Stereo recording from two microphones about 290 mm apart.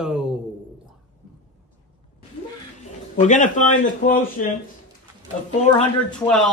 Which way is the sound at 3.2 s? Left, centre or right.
Left.